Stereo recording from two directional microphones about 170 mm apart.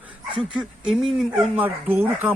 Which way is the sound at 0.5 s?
5° right (ahead or behind).